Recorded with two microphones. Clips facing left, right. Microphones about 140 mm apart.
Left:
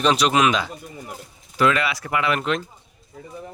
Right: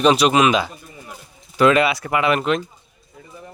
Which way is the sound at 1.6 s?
25° right (ahead or behind).